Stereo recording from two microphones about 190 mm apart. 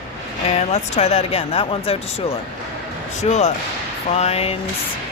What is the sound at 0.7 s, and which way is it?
Speech, 35° left (ahead or behind).